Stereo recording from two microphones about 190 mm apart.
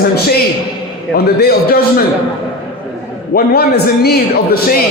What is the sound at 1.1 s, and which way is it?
Speech, 55° left (ahead or behind).